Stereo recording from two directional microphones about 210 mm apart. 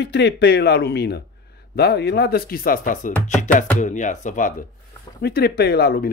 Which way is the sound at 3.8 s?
35° left (ahead or behind).